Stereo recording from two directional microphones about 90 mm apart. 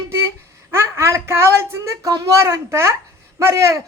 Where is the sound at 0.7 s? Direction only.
30° right (ahead or behind).